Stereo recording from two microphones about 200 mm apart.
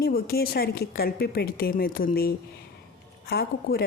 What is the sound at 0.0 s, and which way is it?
A woman's voice, 50° left (ahead or behind).